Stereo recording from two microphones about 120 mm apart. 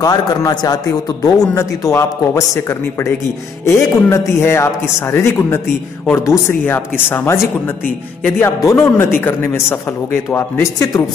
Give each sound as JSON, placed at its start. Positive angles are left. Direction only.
{"t": 0.0, "sound": "a man's voice", "side_deg": 30}
{"t": 8.4, "sound": "a man's voice", "side_deg": 20}